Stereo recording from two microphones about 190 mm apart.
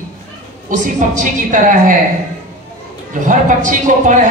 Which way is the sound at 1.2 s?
40° right (ahead or behind).